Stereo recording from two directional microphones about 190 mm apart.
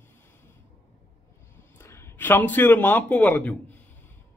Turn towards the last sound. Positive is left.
turn(degrees=10)  # may be behind; listen again after turning